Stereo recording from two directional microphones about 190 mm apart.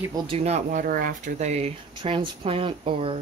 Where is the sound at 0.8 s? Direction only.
45° right (ahead or behind).